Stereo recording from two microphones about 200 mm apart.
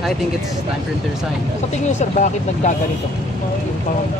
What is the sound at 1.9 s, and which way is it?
Speech, 35° left (ahead or behind).